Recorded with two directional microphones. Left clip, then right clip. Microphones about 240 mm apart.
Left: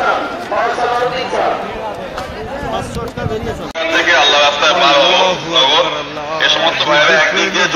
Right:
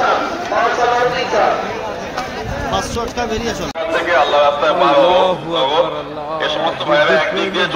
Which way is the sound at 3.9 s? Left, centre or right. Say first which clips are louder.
Left 3 dB; right.